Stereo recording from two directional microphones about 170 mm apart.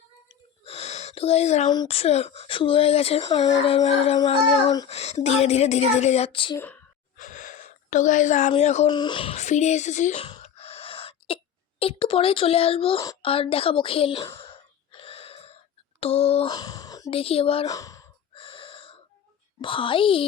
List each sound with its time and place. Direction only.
0.3 s a sound: 35° left (ahead or behind)
1.6 s speech: 25° left (ahead or behind)
1.9 s speech: 35° left (ahead or behind)
7.2 s gasp: 50° left (ahead or behind)
8.9 s speech: 25° left (ahead or behind); by 10.2 s 45° left (ahead or behind)
10.2 s sneeze: 35° left (ahead or behind)
11.8 s speech: 35° left (ahead or behind)
14.3 s a sound: 30° left (ahead or behind)
16.0 s speech: 35° left (ahead or behind)
16.5 s a sound: 20° left (ahead or behind)
17.1 s speech: 35° left (ahead or behind)
17.7 s speech: 20° left (ahead or behind)
18.3 s gasp: 30° left (ahead or behind)
19.6 s speech: 30° left (ahead or behind)